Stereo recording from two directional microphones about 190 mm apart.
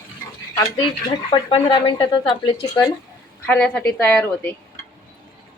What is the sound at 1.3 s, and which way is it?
Speech, 25° left (ahead or behind).